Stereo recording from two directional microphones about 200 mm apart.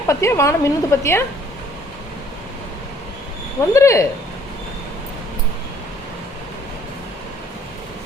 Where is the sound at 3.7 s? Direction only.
15° left (ahead or behind).